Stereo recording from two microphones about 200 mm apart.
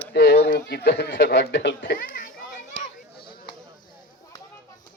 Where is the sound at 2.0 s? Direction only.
45° left (ahead or behind).